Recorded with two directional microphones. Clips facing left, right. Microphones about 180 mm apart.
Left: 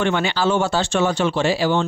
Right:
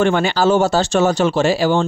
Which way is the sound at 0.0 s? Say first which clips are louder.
Right 5 dB; 45° right (ahead or behind).